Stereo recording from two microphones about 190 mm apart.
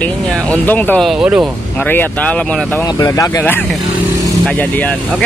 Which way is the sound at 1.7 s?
10° left (ahead or behind).